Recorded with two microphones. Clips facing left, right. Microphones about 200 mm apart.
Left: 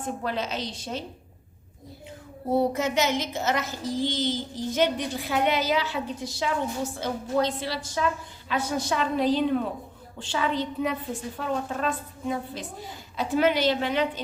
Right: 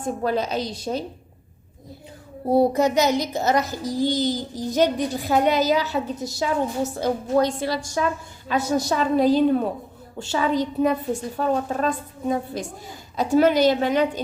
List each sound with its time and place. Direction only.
0.0 s a woman's voice: 40° right (ahead or behind)
2.5 s a woman's voice: 35° right (ahead or behind)